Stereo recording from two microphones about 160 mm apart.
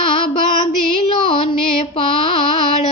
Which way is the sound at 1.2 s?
35° left (ahead or behind).